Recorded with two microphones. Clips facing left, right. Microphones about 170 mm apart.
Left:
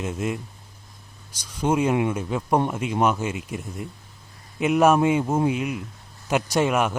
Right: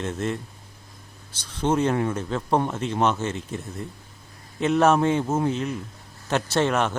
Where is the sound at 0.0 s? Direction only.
10° left (ahead or behind).